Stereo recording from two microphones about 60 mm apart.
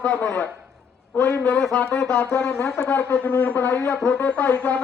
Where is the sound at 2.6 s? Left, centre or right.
Centre.